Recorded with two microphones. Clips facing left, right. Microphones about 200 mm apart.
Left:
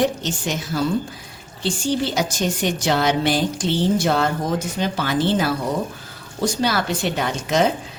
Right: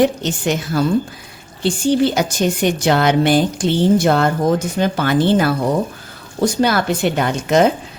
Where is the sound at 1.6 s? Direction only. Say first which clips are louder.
Right 7 dB; 60° right (ahead or behind).